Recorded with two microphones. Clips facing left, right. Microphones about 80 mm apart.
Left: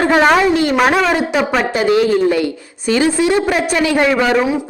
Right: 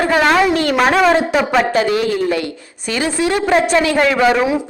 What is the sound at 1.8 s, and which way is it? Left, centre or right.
A man's voice, left.